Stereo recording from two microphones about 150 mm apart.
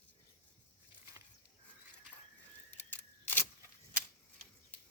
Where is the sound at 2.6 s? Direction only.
10° left (ahead or behind).